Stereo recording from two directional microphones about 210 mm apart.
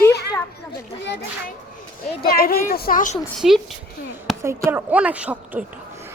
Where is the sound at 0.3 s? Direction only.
20° left (ahead or behind).